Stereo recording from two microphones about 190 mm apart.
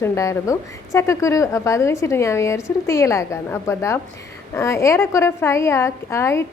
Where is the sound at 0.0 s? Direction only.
15° left (ahead or behind).